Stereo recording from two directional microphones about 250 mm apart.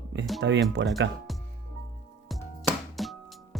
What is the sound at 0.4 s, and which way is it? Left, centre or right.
Speech, right.